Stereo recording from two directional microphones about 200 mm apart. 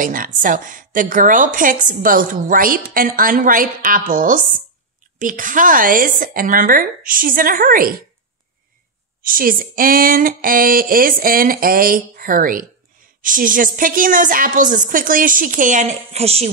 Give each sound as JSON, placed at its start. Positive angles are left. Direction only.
{"t": 0.0, "sound": "a woman's voice", "side_deg": -45}
{"t": 9.2, "sound": "a woman's voice", "side_deg": -45}